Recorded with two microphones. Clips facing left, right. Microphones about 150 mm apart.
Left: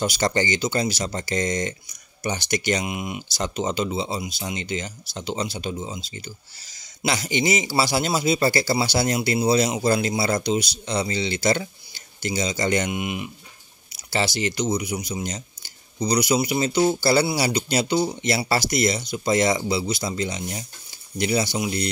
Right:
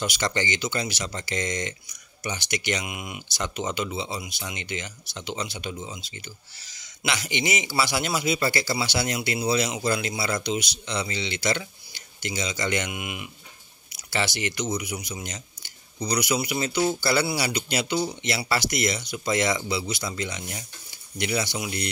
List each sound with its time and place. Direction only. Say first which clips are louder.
0.0 s speech: left 5 dB; 35° left (ahead or behind)